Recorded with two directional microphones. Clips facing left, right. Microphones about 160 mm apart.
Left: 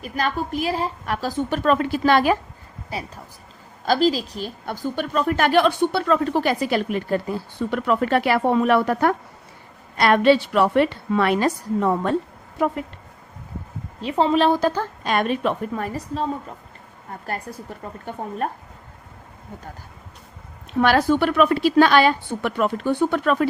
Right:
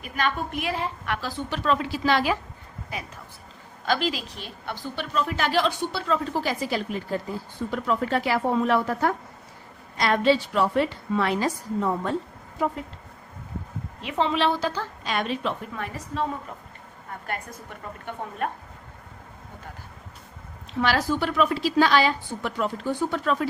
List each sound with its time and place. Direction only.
0.0 s a woman's voice: 35° left (ahead or behind)
2.9 s a woman's voice: 35° left (ahead or behind); by 12.8 s 65° left (ahead or behind)
14.0 s a woman's voice: 35° left (ahead or behind)
20.7 s a woman's voice: 55° left (ahead or behind)